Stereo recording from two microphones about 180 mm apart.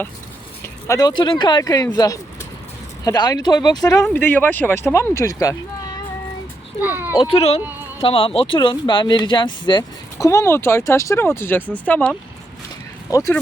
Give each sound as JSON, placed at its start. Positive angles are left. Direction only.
{"t": 0.6, "sound": "speech", "side_deg": 20}
{"t": 4.0, "sound": "speech", "side_deg": 10}
{"t": 6.8, "sound": "a child's voice", "side_deg": -10}
{"t": 7.1, "sound": "speech", "side_deg": 30}
{"t": 7.6, "sound": "speech", "side_deg": -10}
{"t": 8.0, "sound": "speech", "side_deg": 30}
{"t": 13.1, "sound": "speech", "side_deg": 20}